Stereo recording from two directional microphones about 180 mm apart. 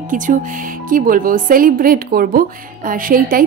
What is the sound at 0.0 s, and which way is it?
A woman's voice, 45° right (ahead or behind).